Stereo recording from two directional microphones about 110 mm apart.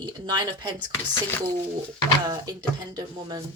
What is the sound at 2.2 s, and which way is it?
A woman's voice, 35° right (ahead or behind).